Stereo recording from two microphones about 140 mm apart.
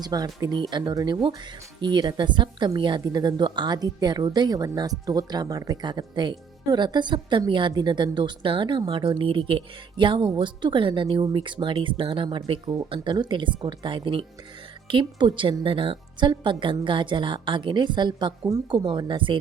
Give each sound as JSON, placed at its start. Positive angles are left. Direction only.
{"t": 0.0, "sound": "a woman's voice", "side_deg": -30}
{"t": 18.9, "sound": "a woman's voice", "side_deg": -35}